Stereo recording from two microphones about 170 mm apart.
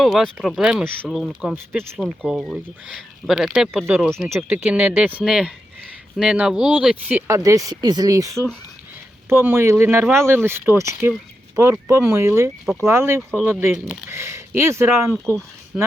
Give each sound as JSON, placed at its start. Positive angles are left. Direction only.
{"t": 0.0, "sound": "speech", "side_deg": 0}